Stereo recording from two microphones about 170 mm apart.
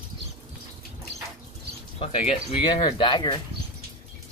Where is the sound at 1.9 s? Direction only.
35° left (ahead or behind).